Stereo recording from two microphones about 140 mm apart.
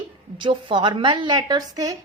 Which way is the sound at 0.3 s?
35° right (ahead or behind).